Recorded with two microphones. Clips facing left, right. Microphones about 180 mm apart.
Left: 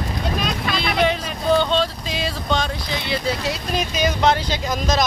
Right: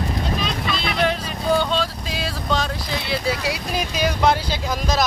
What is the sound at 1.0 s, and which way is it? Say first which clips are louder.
Vehicle: even; 5° right (ahead or behind).